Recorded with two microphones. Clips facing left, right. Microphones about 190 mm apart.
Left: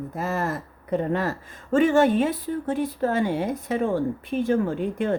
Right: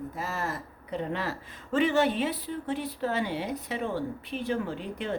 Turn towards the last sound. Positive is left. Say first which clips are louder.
# left 9 dB
turn(degrees=50)  # may be behind; listen again after turning